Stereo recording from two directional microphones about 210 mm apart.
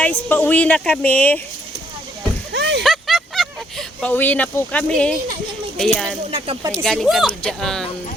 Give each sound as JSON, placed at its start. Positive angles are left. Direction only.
{"t": 0.0, "sound": "speech", "side_deg": 10}
{"t": 2.5, "sound": "a sound", "side_deg": -55}
{"t": 2.8, "sound": "a sound", "side_deg": 0}
{"t": 5.7, "sound": "speech", "side_deg": 5}
{"t": 6.3, "sound": "speech", "side_deg": -20}
{"t": 6.8, "sound": "speech", "side_deg": 0}